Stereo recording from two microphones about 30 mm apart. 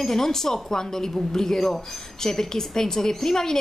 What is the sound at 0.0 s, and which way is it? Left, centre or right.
A woman's voice, centre.